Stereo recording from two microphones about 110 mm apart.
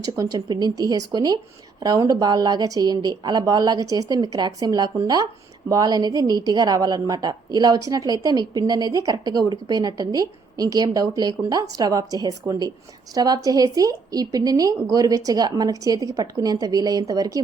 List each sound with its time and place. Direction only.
0.0 s a woman's voice: 35° right (ahead or behind)